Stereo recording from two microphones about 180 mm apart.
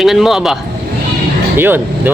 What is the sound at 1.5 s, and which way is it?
Speech, 10° right (ahead or behind).